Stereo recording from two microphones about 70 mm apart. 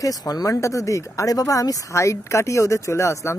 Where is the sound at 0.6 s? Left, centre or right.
Left.